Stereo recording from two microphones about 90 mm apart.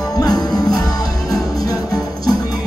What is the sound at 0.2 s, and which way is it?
Music, 50° left (ahead or behind).